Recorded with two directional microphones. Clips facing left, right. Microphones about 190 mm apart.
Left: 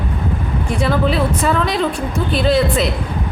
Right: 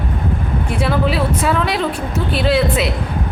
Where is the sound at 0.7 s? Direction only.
5° right (ahead or behind).